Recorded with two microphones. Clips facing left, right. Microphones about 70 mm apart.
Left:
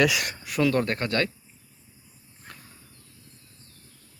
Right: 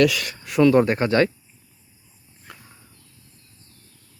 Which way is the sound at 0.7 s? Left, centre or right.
Centre.